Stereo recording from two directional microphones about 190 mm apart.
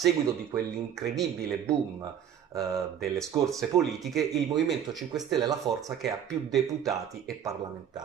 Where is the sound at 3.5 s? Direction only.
Centre (ahead or behind).